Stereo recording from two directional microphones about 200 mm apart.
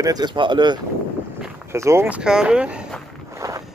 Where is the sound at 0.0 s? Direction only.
20° right (ahead or behind); by 3.0 s 5° right (ahead or behind).